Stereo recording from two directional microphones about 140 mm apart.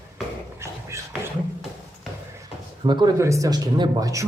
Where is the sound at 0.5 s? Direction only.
20° right (ahead or behind).